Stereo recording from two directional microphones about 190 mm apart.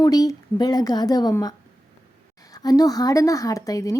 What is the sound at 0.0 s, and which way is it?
Speech, 20° left (ahead or behind).